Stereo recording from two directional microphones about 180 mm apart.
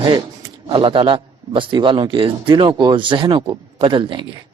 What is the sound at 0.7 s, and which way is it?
Speech, 30° right (ahead or behind).